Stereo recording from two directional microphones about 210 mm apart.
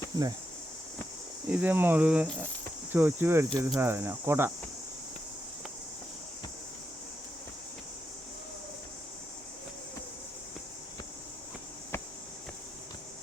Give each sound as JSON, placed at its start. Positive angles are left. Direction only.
{"t": 0.1, "sound": "speech", "side_deg": -15}
{"t": 1.5, "sound": "speech", "side_deg": -10}